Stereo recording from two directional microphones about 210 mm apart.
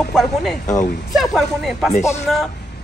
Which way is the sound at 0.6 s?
35° left (ahead or behind).